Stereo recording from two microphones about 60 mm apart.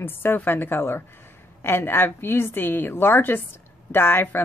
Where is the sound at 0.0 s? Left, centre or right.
Left.